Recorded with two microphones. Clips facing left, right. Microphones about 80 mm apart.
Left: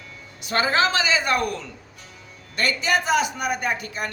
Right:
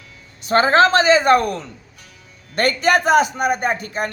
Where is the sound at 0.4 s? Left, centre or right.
Right.